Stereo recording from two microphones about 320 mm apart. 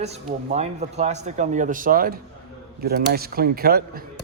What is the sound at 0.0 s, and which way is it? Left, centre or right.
A man's voice, centre.